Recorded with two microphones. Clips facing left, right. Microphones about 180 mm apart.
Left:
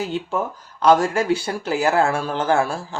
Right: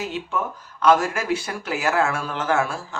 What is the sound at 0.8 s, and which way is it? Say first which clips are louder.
A man's voice: left 3 dB; 35° left (ahead or behind).